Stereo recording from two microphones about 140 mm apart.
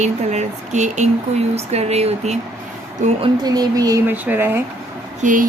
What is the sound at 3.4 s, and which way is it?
Speech, 30° right (ahead or behind).